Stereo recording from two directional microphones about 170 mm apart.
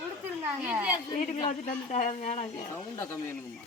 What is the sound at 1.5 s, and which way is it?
Speech, 45° left (ahead or behind).